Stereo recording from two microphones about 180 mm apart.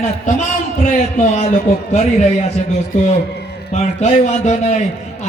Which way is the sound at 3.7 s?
40° left (ahead or behind).